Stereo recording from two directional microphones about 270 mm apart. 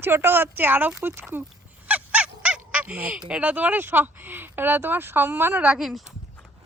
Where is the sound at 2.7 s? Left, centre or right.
Centre.